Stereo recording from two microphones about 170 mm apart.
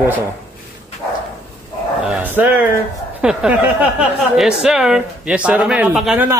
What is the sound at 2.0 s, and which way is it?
Speech, 10° right (ahead or behind).